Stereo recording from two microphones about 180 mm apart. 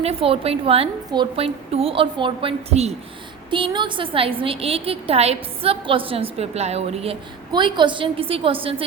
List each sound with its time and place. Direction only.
0.0 s a woman's voice: 30° right (ahead or behind)